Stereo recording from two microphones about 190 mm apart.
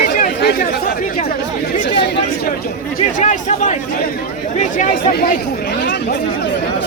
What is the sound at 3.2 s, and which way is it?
Chatter, 40° left (ahead or behind).